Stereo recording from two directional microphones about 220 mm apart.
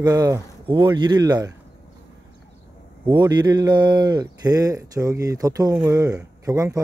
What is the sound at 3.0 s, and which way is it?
Speech, 20° right (ahead or behind).